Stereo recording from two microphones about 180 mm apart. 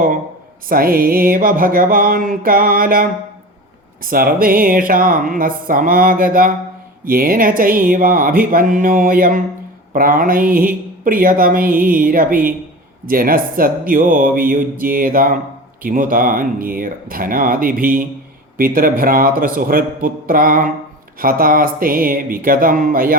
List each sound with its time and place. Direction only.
0.7 s speech: 55° right (ahead or behind)